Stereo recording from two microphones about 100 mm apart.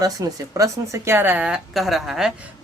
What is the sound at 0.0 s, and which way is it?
Speech, 40° right (ahead or behind).